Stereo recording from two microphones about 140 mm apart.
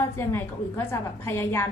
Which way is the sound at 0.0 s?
20° left (ahead or behind).